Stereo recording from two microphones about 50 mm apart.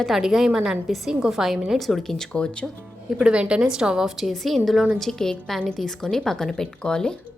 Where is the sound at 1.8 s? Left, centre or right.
Centre.